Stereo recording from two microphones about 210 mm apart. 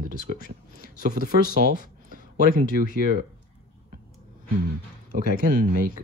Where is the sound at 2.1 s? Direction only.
40° right (ahead or behind).